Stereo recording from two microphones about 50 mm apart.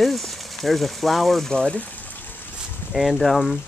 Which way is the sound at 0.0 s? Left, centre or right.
Centre.